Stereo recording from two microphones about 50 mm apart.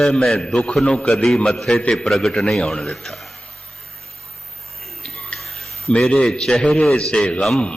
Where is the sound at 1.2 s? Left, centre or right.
Centre.